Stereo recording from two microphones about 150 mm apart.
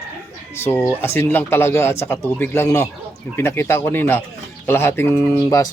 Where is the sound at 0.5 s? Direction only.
15° left (ahead or behind).